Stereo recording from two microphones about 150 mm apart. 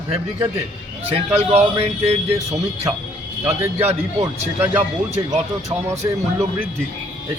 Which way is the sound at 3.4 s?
15° right (ahead or behind).